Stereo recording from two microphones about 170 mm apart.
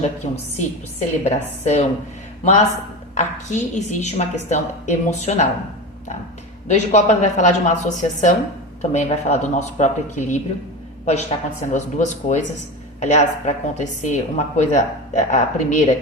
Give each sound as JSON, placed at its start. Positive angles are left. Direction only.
{"t": 0.2, "sound": "a woman's voice", "side_deg": 35}
{"t": 6.7, "sound": "a woman's voice", "side_deg": 40}